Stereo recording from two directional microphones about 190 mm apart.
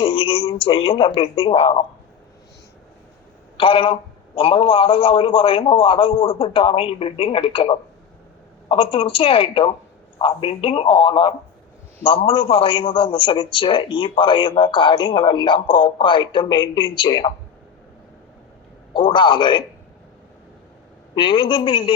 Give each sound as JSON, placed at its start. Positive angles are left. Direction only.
{"t": 0.0, "sound": "speech", "side_deg": 25}
{"t": 3.6, "sound": "a man's voice", "side_deg": 25}
{"t": 18.9, "sound": "a man's voice", "side_deg": 25}
{"t": 21.2, "sound": "a man's voice", "side_deg": 25}